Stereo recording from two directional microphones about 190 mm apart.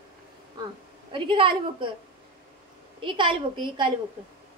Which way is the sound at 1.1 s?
25° right (ahead or behind).